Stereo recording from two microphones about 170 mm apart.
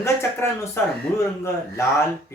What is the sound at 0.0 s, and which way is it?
Speech, 15° left (ahead or behind).